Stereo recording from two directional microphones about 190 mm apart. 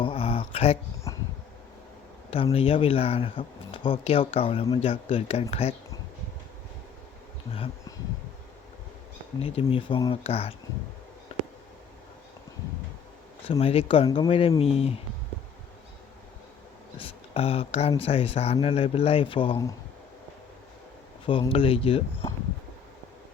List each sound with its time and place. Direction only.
0.0 s a sound: 30° left (ahead or behind)
1.1 s bee: 15° left (ahead or behind)
2.3 s speech: 30° left (ahead or behind)
7.5 s speech: 30° left (ahead or behind)
9.4 s speech: 30° left (ahead or behind)
13.5 s speech: 30° left (ahead or behind)
17.0 s speech: 30° left (ahead or behind)
21.2 s speech: 25° left (ahead or behind)